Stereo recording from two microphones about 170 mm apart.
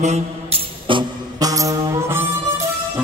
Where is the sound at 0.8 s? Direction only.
25° right (ahead or behind).